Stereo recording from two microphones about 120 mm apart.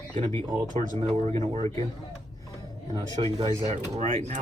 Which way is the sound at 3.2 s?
50° right (ahead or behind).